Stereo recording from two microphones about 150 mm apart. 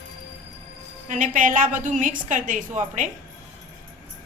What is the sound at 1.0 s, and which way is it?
A woman's voice, 55° right (ahead or behind).